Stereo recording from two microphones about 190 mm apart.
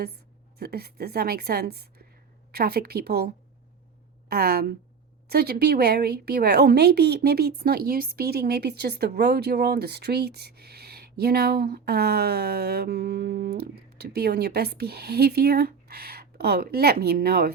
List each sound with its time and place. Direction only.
0.6 s a woman's voice: 55° right (ahead or behind)